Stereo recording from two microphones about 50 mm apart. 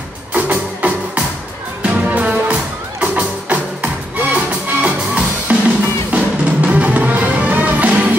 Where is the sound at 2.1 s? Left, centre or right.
Right.